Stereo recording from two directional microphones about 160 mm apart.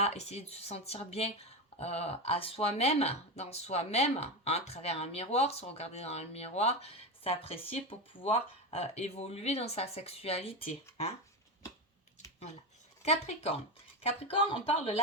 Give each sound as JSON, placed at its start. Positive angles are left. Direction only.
{"t": 0.0, "sound": "speech", "side_deg": 40}
{"t": 13.0, "sound": "speech", "side_deg": 40}